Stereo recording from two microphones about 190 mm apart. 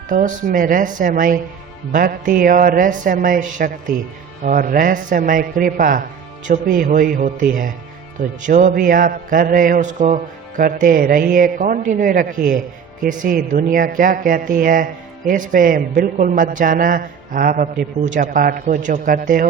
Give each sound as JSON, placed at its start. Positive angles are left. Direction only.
{"t": 0.1, "sound": "a man's voice", "side_deg": -45}